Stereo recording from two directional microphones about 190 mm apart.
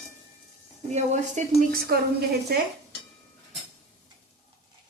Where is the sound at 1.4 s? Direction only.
40° right (ahead or behind).